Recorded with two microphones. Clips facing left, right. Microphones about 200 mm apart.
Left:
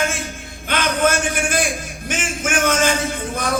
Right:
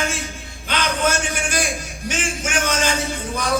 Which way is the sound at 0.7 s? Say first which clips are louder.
Left 3 dB; 55° left (ahead or behind).